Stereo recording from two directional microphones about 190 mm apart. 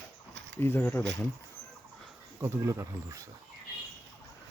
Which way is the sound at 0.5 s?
10° left (ahead or behind).